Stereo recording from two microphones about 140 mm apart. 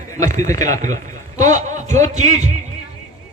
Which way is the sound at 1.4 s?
60° right (ahead or behind).